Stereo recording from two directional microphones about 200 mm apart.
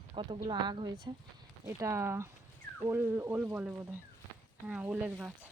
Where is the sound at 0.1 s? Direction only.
25° right (ahead or behind).